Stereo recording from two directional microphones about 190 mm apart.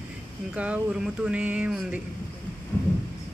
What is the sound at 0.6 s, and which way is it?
Speech, 5° right (ahead or behind).